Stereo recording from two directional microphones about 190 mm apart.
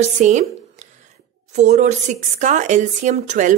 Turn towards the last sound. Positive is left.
turn(degrees=-40)  # may be behind; listen again after turning